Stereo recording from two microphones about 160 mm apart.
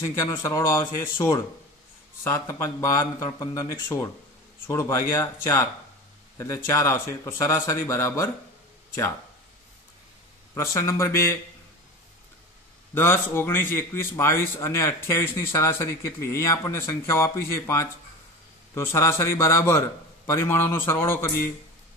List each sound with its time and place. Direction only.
0.0 s a man's voice: 20° left (ahead or behind)
10.5 s a man's voice: 20° left (ahead or behind)
12.9 s a man's voice: 15° left (ahead or behind)